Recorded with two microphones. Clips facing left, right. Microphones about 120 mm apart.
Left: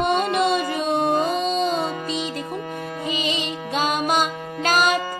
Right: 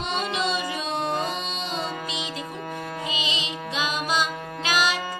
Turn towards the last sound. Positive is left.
turn(degrees=50)  # may be behind; listen again after turning